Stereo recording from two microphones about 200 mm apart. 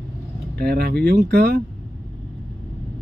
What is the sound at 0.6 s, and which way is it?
Speech, 55° right (ahead or behind).